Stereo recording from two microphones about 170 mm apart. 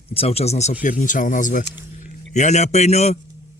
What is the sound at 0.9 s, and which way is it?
A man's voice, 50° left (ahead or behind).